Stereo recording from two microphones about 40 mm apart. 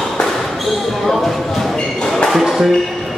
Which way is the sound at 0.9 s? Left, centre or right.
Centre.